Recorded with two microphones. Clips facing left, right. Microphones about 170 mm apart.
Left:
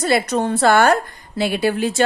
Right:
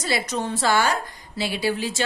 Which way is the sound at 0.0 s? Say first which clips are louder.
Left 8 dB; 55° left (ahead or behind).